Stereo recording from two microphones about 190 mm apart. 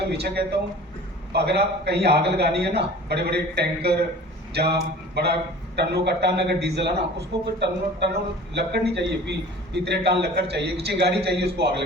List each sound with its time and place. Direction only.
0.0 s a man's voice: 60° right (ahead or behind)